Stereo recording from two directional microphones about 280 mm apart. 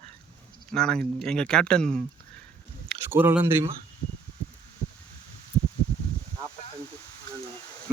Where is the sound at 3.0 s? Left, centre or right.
Centre.